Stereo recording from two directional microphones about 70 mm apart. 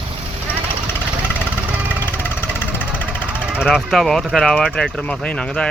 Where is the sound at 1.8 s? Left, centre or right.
Left.